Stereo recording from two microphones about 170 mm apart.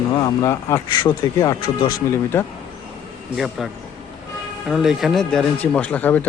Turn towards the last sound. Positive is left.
turn(degrees=10)  # may be behind; listen again after turning